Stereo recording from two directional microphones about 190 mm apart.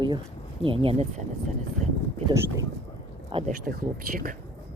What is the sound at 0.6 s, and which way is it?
Speech, 30° right (ahead or behind).